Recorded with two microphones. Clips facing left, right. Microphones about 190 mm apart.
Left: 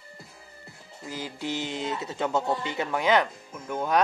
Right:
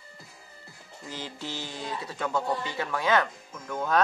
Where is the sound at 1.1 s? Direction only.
10° left (ahead or behind).